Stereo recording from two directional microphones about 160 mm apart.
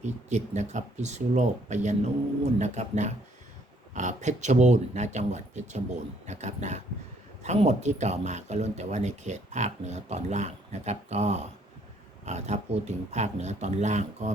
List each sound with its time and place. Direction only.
0.0 s speech: 45° right (ahead or behind)